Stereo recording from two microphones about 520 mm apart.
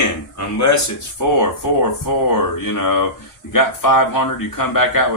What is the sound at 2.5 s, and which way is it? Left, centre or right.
Speech, left.